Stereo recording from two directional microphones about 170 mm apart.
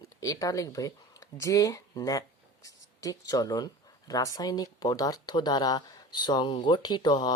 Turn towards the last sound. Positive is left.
turn(degrees=25)  # may be behind; listen again after turning